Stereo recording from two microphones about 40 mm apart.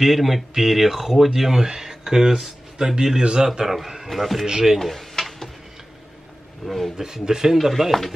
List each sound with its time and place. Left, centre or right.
0.0 s speech: centre
4.5 s speech: centre
4.7 s a sound: centre
6.6 s speech: centre
7.0 s speech: centre
7.5 s speech: centre